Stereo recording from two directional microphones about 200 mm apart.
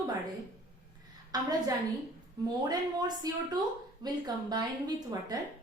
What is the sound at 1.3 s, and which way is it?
Speech, 20° right (ahead or behind).